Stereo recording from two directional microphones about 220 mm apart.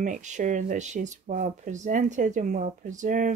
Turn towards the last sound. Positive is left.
turn(degrees=-35)  # may be behind; listen again after turning